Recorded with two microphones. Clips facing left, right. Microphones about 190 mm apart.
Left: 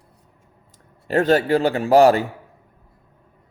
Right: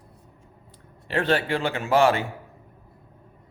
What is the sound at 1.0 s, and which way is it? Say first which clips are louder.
Speech: left 6 dB; 40° left (ahead or behind).